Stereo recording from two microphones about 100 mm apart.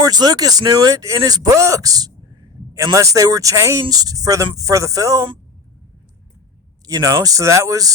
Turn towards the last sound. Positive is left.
turn(degrees=-35)  # may be behind; listen again after turning